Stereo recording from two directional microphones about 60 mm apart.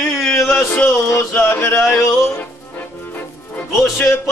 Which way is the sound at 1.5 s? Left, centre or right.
Left.